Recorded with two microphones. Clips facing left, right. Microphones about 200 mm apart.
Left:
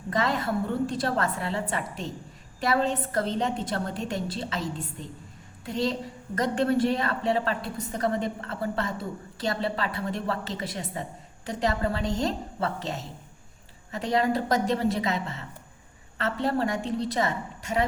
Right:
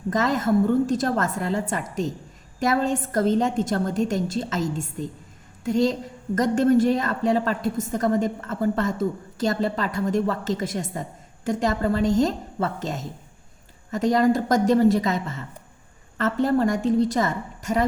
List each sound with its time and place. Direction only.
0.1 s a woman's voice: 45° right (ahead or behind)